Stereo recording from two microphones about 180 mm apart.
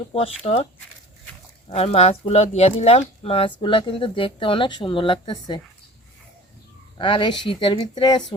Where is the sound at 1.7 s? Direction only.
35° left (ahead or behind).